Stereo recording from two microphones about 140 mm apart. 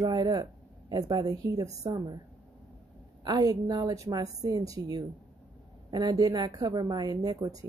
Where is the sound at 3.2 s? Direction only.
30° right (ahead or behind).